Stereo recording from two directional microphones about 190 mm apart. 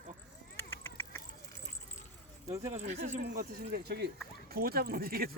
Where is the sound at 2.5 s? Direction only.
15° right (ahead or behind).